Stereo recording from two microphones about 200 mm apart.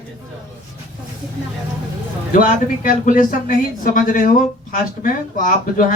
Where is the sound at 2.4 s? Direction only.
45° left (ahead or behind).